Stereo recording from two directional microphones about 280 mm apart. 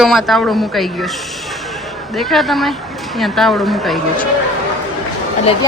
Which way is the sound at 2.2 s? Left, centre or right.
Centre.